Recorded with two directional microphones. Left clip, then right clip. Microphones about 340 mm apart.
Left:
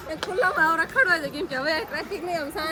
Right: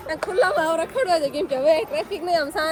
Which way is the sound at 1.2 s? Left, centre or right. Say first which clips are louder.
Right 6 dB; centre.